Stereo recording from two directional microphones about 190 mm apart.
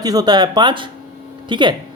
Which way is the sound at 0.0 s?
20° right (ahead or behind).